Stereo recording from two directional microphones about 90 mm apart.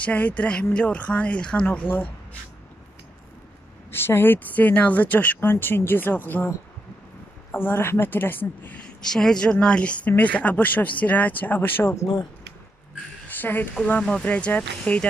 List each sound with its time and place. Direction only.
0.0 s speech: 15° left (ahead or behind)
3.9 s speech: 25° left (ahead or behind)
7.5 s speech: 25° left (ahead or behind)
9.0 s speech: 5° left (ahead or behind); by 12.1 s 30° left (ahead or behind)
13.4 s speech: 20° left (ahead or behind)